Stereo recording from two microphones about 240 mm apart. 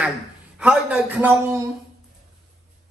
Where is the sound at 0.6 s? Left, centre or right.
Centre.